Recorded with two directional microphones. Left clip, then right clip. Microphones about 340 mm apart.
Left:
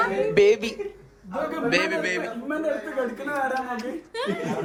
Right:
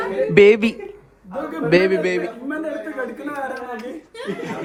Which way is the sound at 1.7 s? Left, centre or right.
Centre.